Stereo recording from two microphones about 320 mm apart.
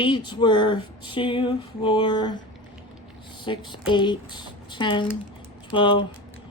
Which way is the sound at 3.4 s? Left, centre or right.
Centre.